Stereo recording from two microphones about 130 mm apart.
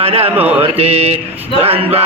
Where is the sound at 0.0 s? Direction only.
50° right (ahead or behind).